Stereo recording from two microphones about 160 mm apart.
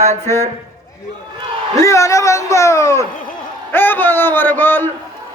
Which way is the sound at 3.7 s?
15° left (ahead or behind).